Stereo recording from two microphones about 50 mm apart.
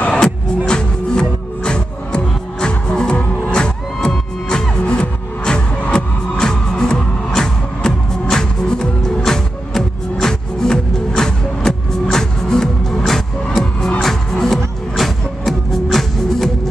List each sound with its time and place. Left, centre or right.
0.7 s music: centre